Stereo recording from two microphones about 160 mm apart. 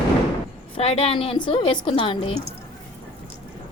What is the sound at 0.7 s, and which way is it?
A woman's voice, 40° left (ahead or behind).